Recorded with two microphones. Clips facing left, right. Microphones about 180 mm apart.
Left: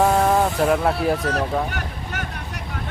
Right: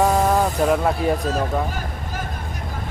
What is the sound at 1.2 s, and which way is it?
Speech, 75° left (ahead or behind).